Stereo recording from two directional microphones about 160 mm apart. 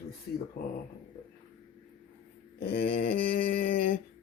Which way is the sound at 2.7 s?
75° left (ahead or behind).